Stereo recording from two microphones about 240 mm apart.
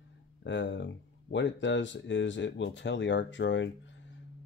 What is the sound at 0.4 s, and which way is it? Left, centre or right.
Speech, left.